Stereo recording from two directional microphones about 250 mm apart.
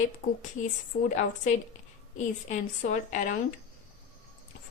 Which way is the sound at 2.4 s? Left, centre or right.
Left.